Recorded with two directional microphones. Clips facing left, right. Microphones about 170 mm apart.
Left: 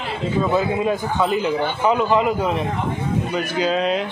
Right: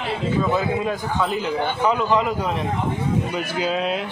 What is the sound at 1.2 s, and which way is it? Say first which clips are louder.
A man's voice: left 3 dB; 5° left (ahead or behind).